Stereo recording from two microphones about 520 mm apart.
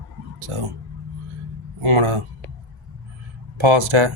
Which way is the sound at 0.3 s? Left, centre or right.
Right.